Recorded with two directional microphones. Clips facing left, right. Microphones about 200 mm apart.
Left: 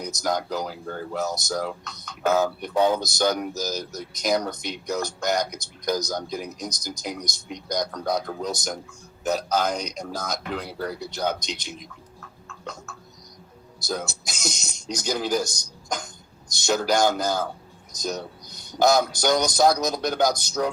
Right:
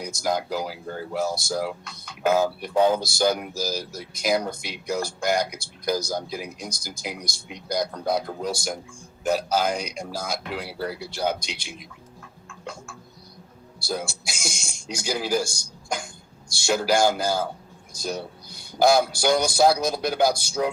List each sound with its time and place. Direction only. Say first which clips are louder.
0.0 s speech: even; 10° right (ahead or behind)
2.7 s speech: right 1 dB; 30° right (ahead or behind)
3.0 s speech: right 1 dB; 10° right (ahead or behind)
12.5 s a sound: even; 10° right (ahead or behind)
13.8 s speech: even; 10° right (ahead or behind)